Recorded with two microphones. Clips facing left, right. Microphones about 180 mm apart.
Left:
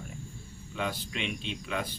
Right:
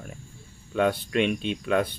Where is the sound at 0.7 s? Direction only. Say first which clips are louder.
Right 11 dB; 60° right (ahead or behind).